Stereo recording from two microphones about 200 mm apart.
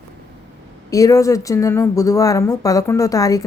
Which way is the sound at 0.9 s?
15° left (ahead or behind).